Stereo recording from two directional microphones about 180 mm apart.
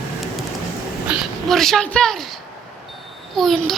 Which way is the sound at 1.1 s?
Centre (ahead or behind).